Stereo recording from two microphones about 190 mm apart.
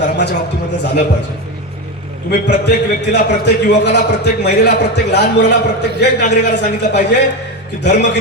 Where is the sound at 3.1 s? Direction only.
60° left (ahead or behind).